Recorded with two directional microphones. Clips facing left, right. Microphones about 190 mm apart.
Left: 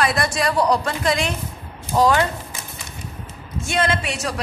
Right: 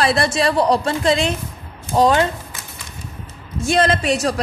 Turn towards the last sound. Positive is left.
turn(degrees=-40)  # may be behind; listen again after turning